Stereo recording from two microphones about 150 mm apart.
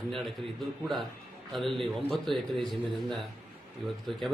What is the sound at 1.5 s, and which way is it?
Speech, centre (ahead or behind).